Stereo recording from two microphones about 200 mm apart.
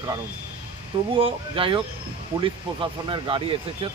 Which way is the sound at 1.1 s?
25° right (ahead or behind).